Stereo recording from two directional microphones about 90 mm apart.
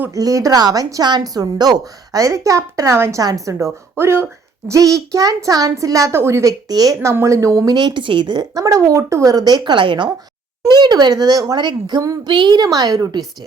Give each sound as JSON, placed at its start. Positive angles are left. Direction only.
{"t": 0.1, "sound": "a woman's voice", "side_deg": -40}
{"t": 4.7, "sound": "a woman's voice", "side_deg": -40}
{"t": 7.1, "sound": "a woman's voice", "side_deg": -35}
{"t": 7.8, "sound": "speech", "side_deg": -60}
{"t": 8.5, "sound": "speech", "side_deg": -40}
{"t": 10.7, "sound": "speech", "side_deg": -50}